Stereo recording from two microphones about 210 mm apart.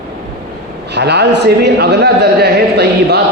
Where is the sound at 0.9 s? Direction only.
55° right (ahead or behind).